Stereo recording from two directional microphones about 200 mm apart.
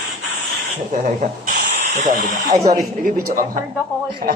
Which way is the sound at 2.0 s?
40° right (ahead or behind).